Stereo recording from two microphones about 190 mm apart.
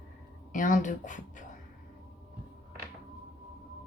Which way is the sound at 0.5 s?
45° left (ahead or behind).